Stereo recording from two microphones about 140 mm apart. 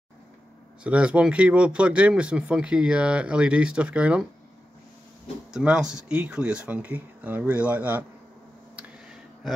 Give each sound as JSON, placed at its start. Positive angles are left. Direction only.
{"t": 0.8, "sound": "speech", "side_deg": -10}
{"t": 5.5, "sound": "speech", "side_deg": -5}
{"t": 8.7, "sound": "a sound", "side_deg": -5}